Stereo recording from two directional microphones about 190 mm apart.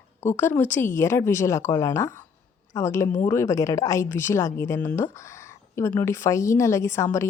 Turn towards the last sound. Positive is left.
turn(degrees=15)  # may be behind; listen again after turning